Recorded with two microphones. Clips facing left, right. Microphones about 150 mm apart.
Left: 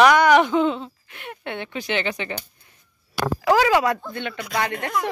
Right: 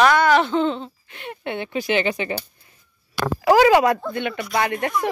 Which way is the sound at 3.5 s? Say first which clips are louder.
Right 6 dB; 50° right (ahead or behind).